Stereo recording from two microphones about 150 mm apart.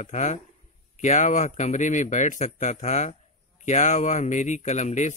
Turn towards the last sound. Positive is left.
turn(degrees=50)  # may be behind; listen again after turning